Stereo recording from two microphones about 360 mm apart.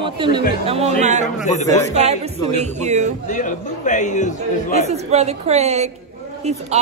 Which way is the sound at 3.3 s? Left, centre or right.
Left.